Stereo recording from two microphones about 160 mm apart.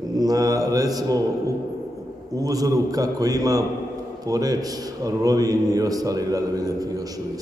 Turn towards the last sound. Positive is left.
turn(degrees=-20)  # may be behind; listen again after turning